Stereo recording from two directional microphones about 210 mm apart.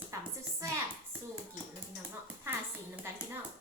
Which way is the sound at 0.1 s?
15° right (ahead or behind).